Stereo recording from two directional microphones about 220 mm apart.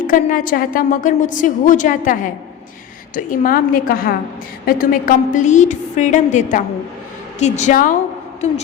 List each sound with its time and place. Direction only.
0.1 s a woman's voice: 40° left (ahead or behind)